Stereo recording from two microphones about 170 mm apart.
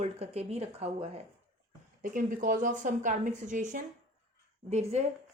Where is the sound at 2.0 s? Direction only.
50° right (ahead or behind).